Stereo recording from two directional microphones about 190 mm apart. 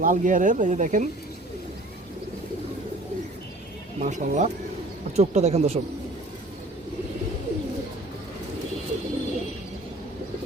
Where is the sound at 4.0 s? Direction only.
40° right (ahead or behind).